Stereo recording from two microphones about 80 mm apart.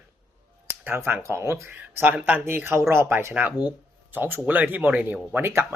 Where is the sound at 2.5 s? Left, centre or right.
Right.